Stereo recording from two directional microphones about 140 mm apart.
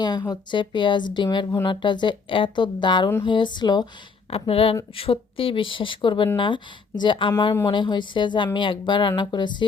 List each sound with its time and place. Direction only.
0.0 s speech: 30° left (ahead or behind)
4.3 s speech: 45° left (ahead or behind)